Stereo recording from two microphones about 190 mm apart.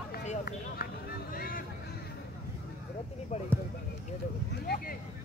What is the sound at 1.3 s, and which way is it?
Vehicle, 50° left (ahead or behind).